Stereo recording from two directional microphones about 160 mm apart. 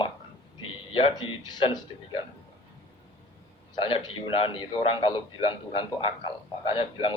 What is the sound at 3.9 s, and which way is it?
A man's voice, 35° left (ahead or behind).